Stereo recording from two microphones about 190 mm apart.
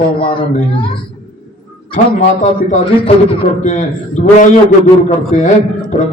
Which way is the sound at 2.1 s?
40° left (ahead or behind).